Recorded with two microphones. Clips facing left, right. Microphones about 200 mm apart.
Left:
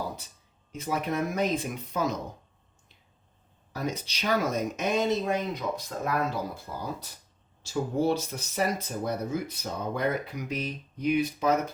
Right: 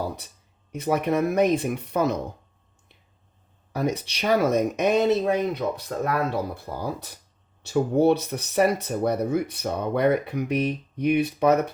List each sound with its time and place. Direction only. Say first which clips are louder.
0.7 s speech: right 7 dB; 60° right (ahead or behind)
3.7 s speech: right 7 dB; 60° right (ahead or behind)